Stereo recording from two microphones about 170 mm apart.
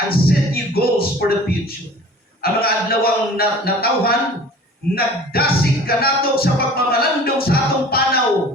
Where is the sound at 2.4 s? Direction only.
65° left (ahead or behind).